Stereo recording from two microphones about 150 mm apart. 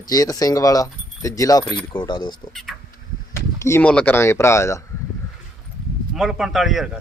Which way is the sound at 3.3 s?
20° left (ahead or behind).